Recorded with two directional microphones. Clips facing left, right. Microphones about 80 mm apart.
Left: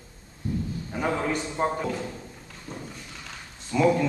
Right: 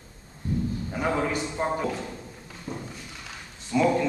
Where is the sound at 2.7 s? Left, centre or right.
Right.